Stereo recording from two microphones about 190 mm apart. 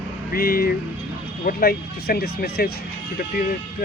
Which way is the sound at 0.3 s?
50° left (ahead or behind).